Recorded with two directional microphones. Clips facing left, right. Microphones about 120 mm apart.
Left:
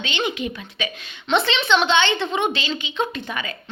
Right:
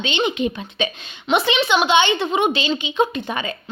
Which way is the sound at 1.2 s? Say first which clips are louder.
Right 2 dB; 15° right (ahead or behind).